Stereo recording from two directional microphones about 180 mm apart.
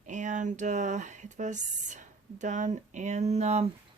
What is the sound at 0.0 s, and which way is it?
Speech, 45° right (ahead or behind).